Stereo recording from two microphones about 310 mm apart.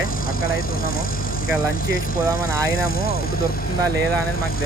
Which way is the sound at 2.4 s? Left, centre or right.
Left.